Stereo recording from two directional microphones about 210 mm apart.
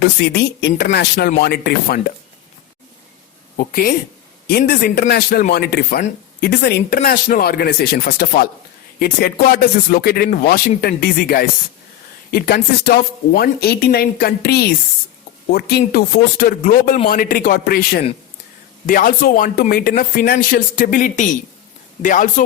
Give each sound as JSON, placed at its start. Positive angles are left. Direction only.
{"t": 0.2, "sound": "a man's voice", "side_deg": 50}
{"t": 3.7, "sound": "a man's voice", "side_deg": 45}